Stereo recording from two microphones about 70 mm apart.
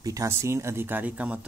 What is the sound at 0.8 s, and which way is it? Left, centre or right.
Speech, right.